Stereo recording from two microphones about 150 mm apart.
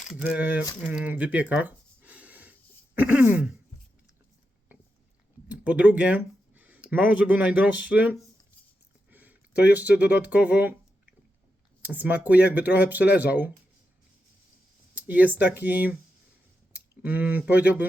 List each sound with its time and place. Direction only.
0.1 s speech: 10° right (ahead or behind)
0.9 s a sound: 10° right (ahead or behind)
2.9 s speech: 10° right (ahead or behind)
5.5 s speech: 10° right (ahead or behind)
9.0 s a sound: 10° right (ahead or behind)
10.0 s speech: 10° right (ahead or behind)
14.9 s speech: 10° right (ahead or behind)